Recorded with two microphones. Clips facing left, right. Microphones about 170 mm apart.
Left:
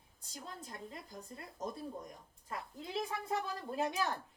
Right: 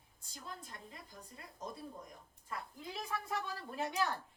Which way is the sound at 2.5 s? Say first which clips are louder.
Left 2 dB; 25° left (ahead or behind).